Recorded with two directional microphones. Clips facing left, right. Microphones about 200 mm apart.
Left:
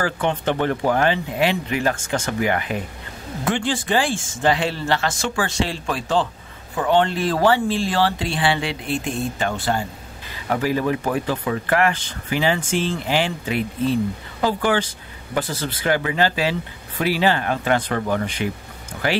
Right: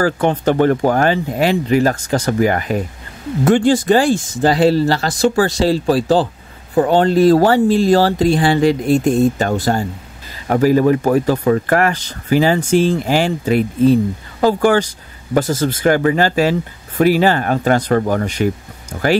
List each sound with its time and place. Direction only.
0.0 s speech: 40° right (ahead or behind)